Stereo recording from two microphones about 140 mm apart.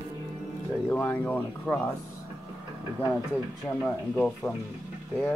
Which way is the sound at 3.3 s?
10° left (ahead or behind).